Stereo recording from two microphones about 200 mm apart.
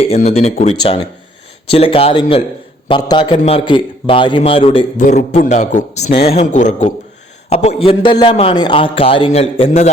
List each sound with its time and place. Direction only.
0.0 s a man's voice: 30° left (ahead or behind)